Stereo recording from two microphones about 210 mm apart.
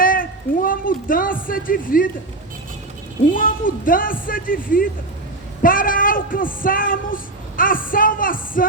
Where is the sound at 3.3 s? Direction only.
40° left (ahead or behind).